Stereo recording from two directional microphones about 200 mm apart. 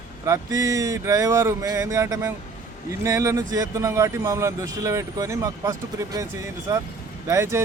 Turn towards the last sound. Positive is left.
turn(degrees=-15)  # may be behind; listen again after turning